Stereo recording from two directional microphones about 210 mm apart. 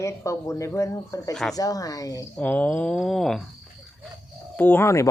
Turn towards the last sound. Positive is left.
turn(degrees=15)  # may be behind; listen again after turning